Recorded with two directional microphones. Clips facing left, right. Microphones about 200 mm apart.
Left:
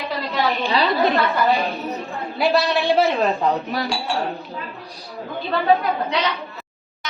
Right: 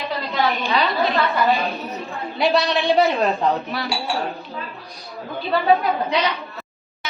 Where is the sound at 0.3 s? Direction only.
Centre (ahead or behind).